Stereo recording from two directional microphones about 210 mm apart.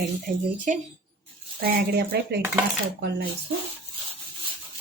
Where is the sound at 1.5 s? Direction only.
45° right (ahead or behind).